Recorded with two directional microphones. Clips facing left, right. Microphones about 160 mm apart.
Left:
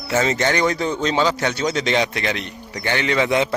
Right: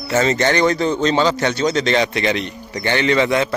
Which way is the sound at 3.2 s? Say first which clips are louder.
Right 1 dB; 15° left (ahead or behind).